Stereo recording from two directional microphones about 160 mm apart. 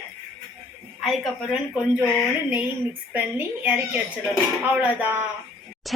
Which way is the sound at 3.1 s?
10° right (ahead or behind).